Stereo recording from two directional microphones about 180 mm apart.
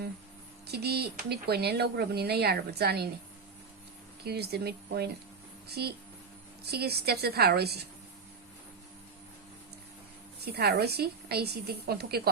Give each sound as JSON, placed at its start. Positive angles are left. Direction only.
{"t": 0.7, "sound": "speech", "side_deg": -60}
{"t": 4.2, "sound": "speech", "side_deg": -60}
{"t": 10.4, "sound": "speech", "side_deg": -65}